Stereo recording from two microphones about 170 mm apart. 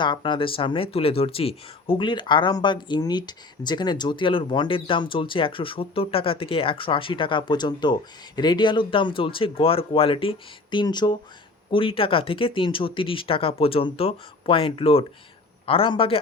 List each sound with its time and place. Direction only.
0.0 s speech: 30° left (ahead or behind)